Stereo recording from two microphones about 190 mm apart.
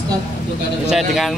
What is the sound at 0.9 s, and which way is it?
Speech, centre (ahead or behind).